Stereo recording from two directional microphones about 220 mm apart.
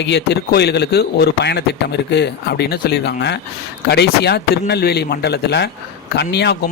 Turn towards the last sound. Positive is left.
turn(degrees=50)  # may be behind; listen again after turning